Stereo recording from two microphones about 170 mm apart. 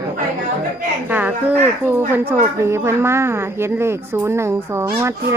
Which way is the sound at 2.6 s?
15° right (ahead or behind).